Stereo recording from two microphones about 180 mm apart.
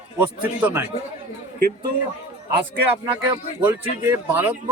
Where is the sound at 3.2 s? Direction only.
10° right (ahead or behind).